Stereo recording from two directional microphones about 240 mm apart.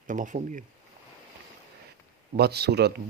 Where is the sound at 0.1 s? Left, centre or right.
Right.